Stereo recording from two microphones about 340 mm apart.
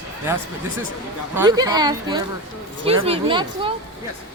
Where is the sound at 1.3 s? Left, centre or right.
Centre.